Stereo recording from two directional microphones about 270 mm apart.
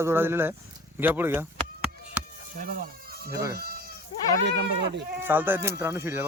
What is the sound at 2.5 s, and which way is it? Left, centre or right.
Speech, right.